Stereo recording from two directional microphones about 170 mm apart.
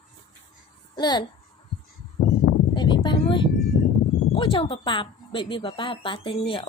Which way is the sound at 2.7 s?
25° left (ahead or behind).